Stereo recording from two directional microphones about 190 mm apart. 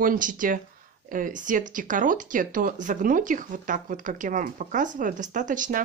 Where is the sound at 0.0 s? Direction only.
45° right (ahead or behind).